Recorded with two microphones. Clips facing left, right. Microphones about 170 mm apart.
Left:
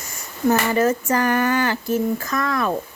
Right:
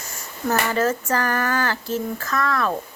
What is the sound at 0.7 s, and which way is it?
Speech, 15° left (ahead or behind).